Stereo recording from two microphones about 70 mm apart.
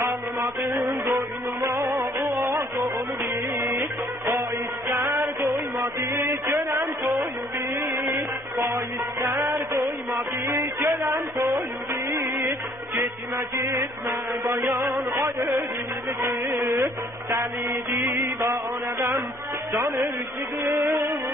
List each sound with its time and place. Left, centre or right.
0.0 s music: right
3.5 s music: right
11.1 s a sound: right
11.9 s music: right
15.0 s a sound: right
16.2 s music: right
20.6 s music: right